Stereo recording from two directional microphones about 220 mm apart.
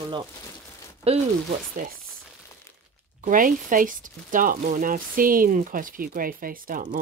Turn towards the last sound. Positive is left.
turn(degrees=-40)  # may be behind; listen again after turning